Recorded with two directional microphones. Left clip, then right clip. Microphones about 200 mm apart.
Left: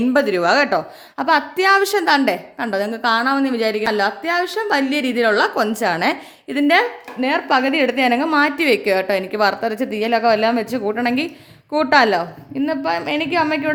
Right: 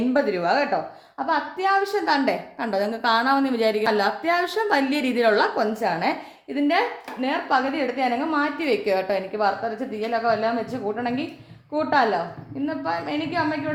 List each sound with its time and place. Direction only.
0.1 s a woman's voice: 45° left (ahead or behind); by 13.6 s 60° left (ahead or behind)